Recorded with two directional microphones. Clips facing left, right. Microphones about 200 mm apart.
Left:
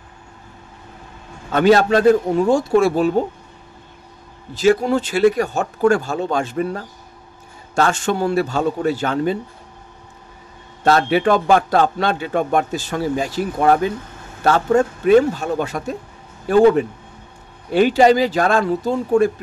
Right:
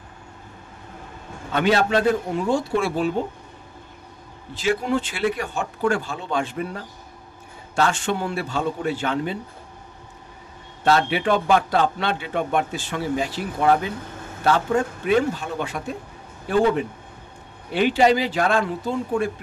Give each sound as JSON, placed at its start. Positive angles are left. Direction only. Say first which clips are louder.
{"t": 1.5, "sound": "a man's voice", "louder": "left 6 dB", "side_deg": 45}
{"t": 4.6, "sound": "a man's voice", "louder": "left 7 dB", "side_deg": 40}
{"t": 10.8, "sound": "a man's voice", "louder": "left 4 dB", "side_deg": 40}